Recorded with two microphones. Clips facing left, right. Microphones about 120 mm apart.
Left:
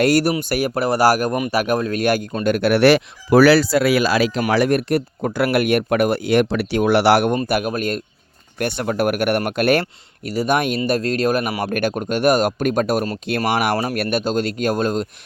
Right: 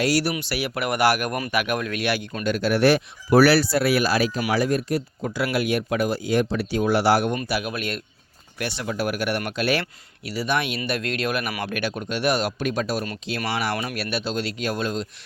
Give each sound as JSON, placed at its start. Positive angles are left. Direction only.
{"t": 0.0, "sound": "speech", "side_deg": 50}
{"t": 2.4, "sound": "speech", "side_deg": 55}
{"t": 4.5, "sound": "speech", "side_deg": 70}
{"t": 7.4, "sound": "speech", "side_deg": 50}